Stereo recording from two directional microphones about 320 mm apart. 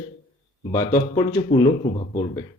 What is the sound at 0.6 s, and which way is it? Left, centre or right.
A man's voice, centre.